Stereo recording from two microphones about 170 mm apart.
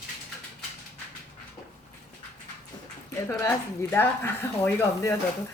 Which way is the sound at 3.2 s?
15° left (ahead or behind).